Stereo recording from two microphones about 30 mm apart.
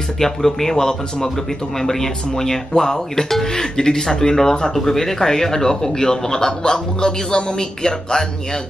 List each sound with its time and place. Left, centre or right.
0.2 s speech: centre